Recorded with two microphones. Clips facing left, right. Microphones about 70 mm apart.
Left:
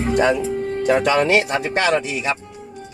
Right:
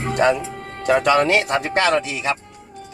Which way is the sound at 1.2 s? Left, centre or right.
Right.